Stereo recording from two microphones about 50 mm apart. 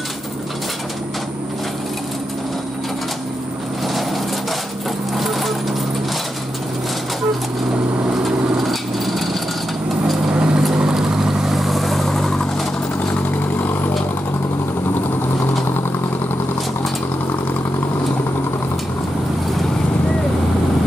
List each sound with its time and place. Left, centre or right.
5.1 s vehicle: centre
8.2 s vehicle: centre
10.3 s vehicle: centre
13.1 s vehicle: left